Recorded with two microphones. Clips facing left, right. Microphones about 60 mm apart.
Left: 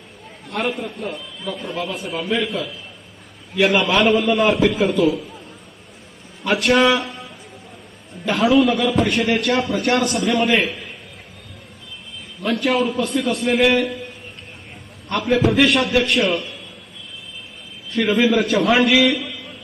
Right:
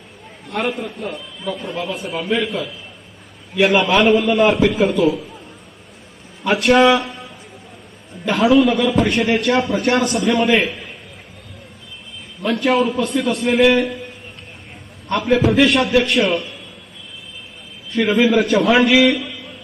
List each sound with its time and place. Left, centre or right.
0.4 s a man's voice: centre
2.3 s a man's voice: centre
3.7 s a man's voice: centre
6.4 s a man's voice: centre
8.9 s a man's voice: centre
12.4 s a man's voice: centre
15.4 s a man's voice: centre
17.9 s a man's voice: centre